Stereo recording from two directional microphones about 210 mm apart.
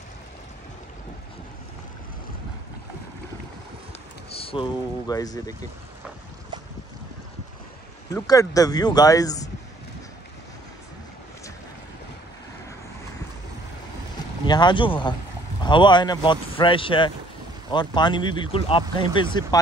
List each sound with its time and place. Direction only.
4.3 s speech: 25° left (ahead or behind)
8.1 s speech: 15° left (ahead or behind)
14.4 s speech: 20° left (ahead or behind)